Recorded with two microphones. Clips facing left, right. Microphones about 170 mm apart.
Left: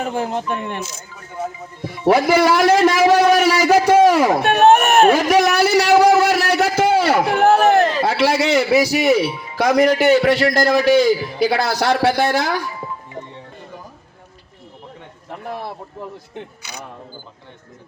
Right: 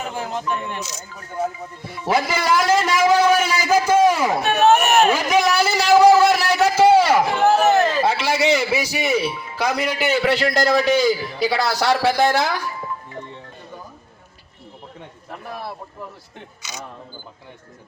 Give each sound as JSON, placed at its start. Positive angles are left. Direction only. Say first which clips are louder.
{"t": 0.0, "sound": "speech", "louder": "left 4 dB", "side_deg": 50}
{"t": 2.0, "sound": "a man's voice", "louder": "left 6 dB", "side_deg": 60}
{"t": 5.6, "sound": "a sound", "louder": "right 2 dB", "side_deg": 65}
{"t": 11.4, "sound": "a man's voice", "louder": "left 2 dB", "side_deg": 50}
{"t": 15.5, "sound": "speech", "louder": "left 2 dB", "side_deg": 20}